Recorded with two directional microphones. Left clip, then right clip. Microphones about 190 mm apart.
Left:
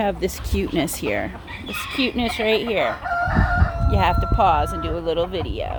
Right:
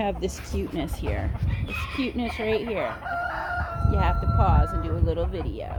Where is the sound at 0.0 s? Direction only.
20° left (ahead or behind).